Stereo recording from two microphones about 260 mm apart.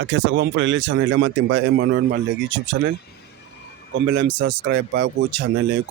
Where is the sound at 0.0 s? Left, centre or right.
Right.